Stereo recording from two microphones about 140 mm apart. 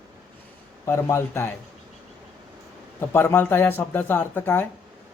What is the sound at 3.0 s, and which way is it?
Speech, 15° left (ahead or behind).